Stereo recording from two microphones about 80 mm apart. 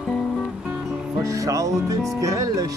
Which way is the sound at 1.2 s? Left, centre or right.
Right.